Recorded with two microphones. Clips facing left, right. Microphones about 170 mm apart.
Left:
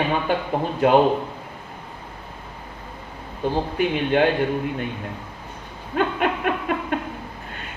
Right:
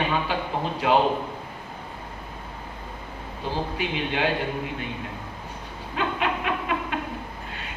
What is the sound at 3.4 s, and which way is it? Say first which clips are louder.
Speech: left 6 dB; 55° left (ahead or behind).